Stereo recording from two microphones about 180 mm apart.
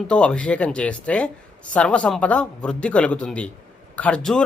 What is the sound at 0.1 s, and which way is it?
Speech, 5° left (ahead or behind).